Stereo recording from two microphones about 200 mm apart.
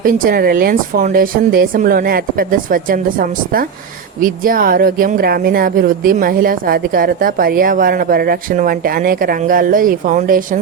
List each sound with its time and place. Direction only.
0.0 s a woman's voice: 45° right (ahead or behind)